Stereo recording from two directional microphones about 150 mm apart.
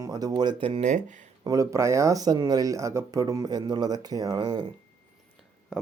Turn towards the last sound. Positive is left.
turn(degrees=-25)  # may be behind; listen again after turning